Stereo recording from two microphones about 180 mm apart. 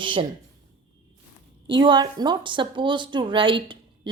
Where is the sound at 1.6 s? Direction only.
25° right (ahead or behind).